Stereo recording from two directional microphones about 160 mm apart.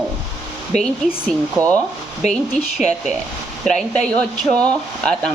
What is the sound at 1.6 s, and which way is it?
Speech, 20° right (ahead or behind).